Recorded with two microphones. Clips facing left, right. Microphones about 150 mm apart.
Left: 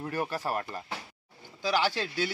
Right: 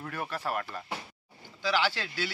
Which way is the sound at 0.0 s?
40° left (ahead or behind).